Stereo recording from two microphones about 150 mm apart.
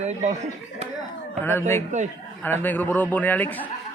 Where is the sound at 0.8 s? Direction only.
50° right (ahead or behind).